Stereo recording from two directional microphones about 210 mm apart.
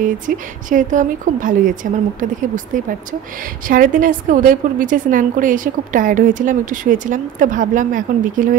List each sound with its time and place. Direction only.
0.7 s a woman's voice: 40° right (ahead or behind)